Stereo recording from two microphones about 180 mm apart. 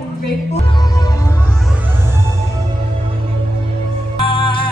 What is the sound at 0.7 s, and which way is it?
Music, 20° left (ahead or behind).